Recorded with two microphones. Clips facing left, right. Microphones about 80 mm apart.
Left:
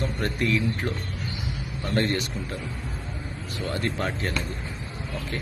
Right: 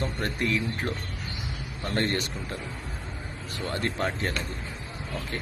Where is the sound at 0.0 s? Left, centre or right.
Right.